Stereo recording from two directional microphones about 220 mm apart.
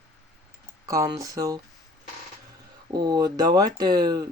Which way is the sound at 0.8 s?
15° right (ahead or behind).